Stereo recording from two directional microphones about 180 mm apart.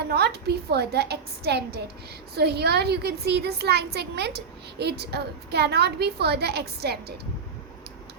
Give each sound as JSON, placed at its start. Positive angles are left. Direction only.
{"t": 0.0, "sound": "a child's voice", "side_deg": -65}